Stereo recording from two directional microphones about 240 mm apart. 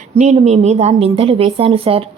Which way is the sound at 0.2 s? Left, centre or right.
Right.